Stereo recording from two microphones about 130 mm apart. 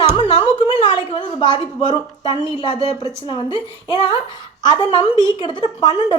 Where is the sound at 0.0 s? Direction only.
55° left (ahead or behind).